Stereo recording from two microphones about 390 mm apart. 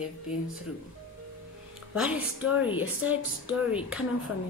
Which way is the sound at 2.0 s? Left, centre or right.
Centre.